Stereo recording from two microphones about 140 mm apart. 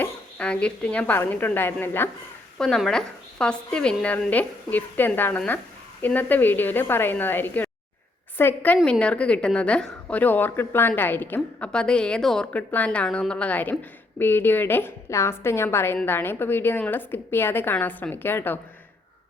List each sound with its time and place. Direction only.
0.0 s a woman's voice: 10° left (ahead or behind)
2.6 s a woman's voice: 5° left (ahead or behind)